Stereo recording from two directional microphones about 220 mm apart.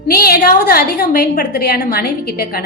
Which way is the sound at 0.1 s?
45° left (ahead or behind).